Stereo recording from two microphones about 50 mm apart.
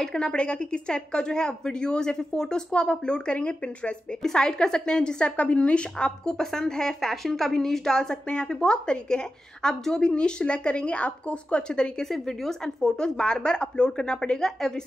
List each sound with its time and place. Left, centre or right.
0.0 s a woman's voice: centre
4.2 s a woman's voice: centre
5.3 s a woman's voice: left
12.1 s a woman's voice: centre